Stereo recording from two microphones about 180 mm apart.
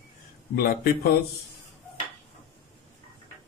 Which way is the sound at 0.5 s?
55° left (ahead or behind).